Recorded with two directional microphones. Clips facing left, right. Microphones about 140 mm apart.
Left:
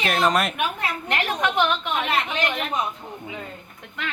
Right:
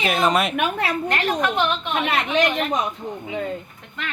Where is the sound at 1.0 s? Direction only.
15° left (ahead or behind).